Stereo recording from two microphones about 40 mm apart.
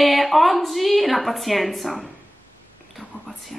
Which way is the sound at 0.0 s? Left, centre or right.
Centre.